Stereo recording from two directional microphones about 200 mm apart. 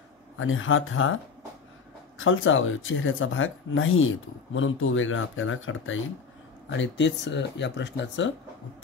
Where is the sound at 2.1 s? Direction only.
75° left (ahead or behind).